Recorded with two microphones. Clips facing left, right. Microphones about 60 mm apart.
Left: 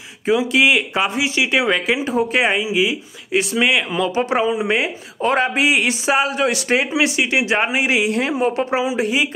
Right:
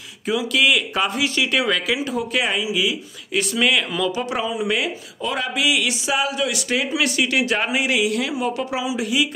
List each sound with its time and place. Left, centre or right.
0.3 s speech: left